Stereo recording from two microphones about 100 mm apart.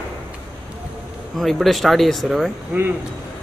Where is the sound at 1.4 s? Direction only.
Centre (ahead or behind).